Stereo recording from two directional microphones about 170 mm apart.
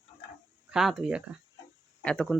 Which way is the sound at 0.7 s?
5° right (ahead or behind).